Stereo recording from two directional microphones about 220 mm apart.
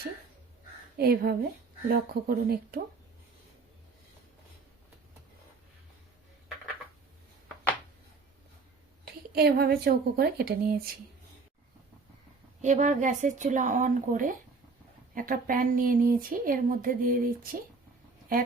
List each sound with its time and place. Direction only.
0.9 s speech: 45° right (ahead or behind)
9.3 s speech: 45° right (ahead or behind)
12.6 s speech: 35° right (ahead or behind)